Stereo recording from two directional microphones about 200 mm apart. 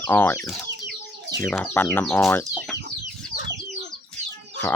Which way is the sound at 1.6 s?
10° left (ahead or behind).